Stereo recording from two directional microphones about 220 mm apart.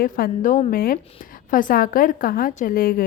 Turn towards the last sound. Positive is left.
turn(degrees=40)  # may be behind; listen again after turning